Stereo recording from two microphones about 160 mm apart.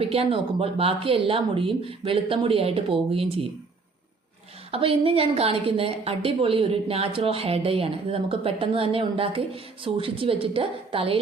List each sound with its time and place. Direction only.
0.0 s a woman's voice: 35° right (ahead or behind)
4.7 s a woman's voice: 35° right (ahead or behind)